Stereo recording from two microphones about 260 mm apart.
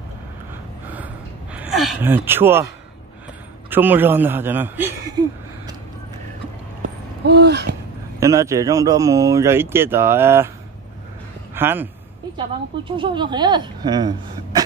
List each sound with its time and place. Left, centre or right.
0.8 s gasp: centre
3.7 s speech: centre
6.8 s a sound: right
8.2 s speech: centre
11.5 s speech: centre
12.4 s speech: centre